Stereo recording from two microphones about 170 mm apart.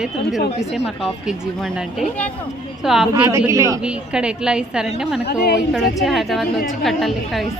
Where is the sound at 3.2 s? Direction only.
15° right (ahead or behind).